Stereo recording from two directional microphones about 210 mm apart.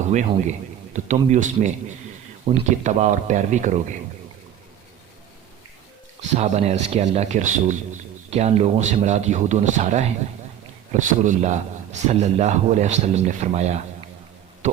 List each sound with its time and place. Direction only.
0.0 s speech: 35° right (ahead or behind)
6.2 s speech: 35° right (ahead or behind)
14.6 s a sound: 35° right (ahead or behind)